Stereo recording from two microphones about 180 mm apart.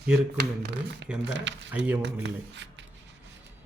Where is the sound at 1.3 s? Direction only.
85° right.